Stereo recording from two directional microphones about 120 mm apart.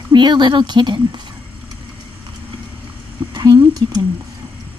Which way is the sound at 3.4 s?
30° right (ahead or behind).